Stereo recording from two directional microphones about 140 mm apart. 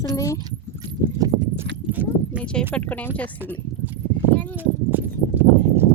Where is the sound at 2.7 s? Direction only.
10° left (ahead or behind).